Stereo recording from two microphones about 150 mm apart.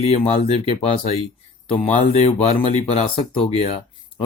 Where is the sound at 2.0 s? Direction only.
45° left (ahead or behind).